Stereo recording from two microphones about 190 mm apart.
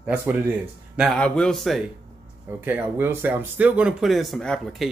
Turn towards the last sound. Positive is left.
turn(degrees=0)  # may be behind; listen again after turning